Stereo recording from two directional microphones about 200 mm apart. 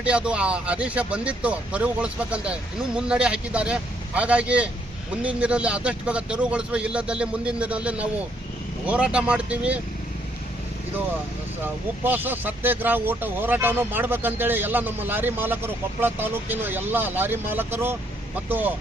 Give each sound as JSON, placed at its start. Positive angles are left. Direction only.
{"t": 0.0, "sound": "speech", "side_deg": -5}
{"t": 11.6, "sound": "speech", "side_deg": -10}